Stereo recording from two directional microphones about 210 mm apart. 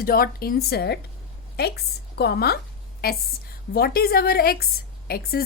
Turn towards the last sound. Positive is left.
turn(degrees=45)  # may be behind; listen again after turning